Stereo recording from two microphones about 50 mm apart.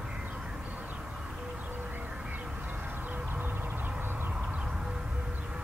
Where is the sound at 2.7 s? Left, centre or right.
Right.